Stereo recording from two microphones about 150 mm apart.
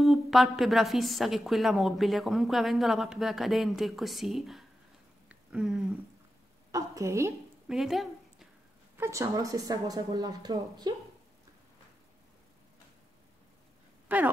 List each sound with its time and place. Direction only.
0.0 s a woman's voice: centre (ahead or behind)
5.3 s a sound: 5° right (ahead or behind)
6.7 s a woman's voice: 20° right (ahead or behind)
7.6 s a sound: centre (ahead or behind)
8.9 s speech: 15° right (ahead or behind)
14.0 s speech: 10° right (ahead or behind)